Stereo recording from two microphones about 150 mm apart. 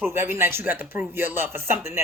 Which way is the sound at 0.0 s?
15° right (ahead or behind).